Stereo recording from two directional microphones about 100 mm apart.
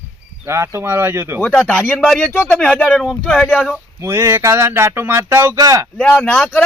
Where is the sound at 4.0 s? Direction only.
25° right (ahead or behind).